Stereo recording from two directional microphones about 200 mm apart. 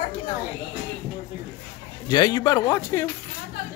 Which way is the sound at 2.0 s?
20° left (ahead or behind).